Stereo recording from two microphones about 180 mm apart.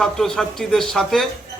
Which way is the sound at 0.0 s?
5° left (ahead or behind).